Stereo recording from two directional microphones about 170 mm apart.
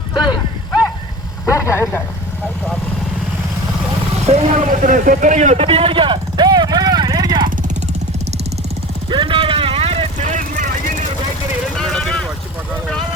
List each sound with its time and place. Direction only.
0.1 s a sound: 25° left (ahead or behind)
1.5 s speech: 15° left (ahead or behind)
4.3 s vehicle: 40° right (ahead or behind); by 7.5 s 25° right (ahead or behind)
9.0 s vehicle: 30° right (ahead or behind); by 10.9 s 50° right (ahead or behind)
11.7 s vehicle: centre (ahead or behind)